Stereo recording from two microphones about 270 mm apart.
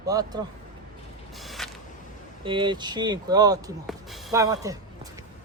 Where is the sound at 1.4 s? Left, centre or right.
Centre.